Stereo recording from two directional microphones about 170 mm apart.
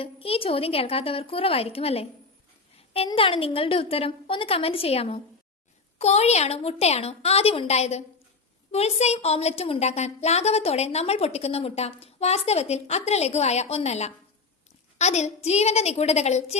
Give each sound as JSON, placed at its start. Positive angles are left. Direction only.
{"t": 0.0, "sound": "a woman's voice", "side_deg": 35}
{"t": 3.1, "sound": "a woman's voice", "side_deg": 30}